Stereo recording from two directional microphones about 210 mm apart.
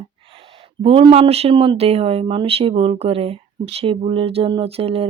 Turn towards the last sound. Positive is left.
turn(degrees=-30)  # may be behind; listen again after turning